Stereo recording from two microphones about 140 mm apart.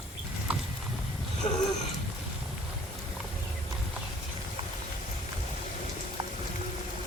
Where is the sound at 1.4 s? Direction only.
35° left (ahead or behind).